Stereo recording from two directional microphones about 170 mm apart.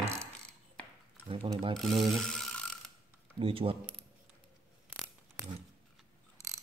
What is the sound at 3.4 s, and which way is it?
Speech, 30° right (ahead or behind).